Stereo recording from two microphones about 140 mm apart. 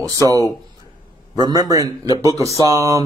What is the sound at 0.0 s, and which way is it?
Speech, 25° right (ahead or behind).